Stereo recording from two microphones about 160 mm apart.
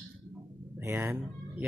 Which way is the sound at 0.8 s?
15° right (ahead or behind).